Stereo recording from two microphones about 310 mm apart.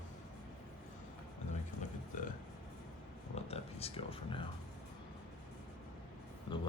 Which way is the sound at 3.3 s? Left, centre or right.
Centre.